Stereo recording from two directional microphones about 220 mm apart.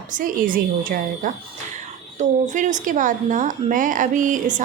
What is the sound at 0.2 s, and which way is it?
Speech, 40° right (ahead or behind).